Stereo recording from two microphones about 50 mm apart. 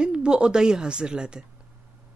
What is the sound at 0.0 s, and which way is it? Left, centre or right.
A woman's voice, centre.